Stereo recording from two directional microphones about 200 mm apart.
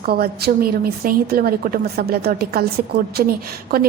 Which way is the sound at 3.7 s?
50° right (ahead or behind).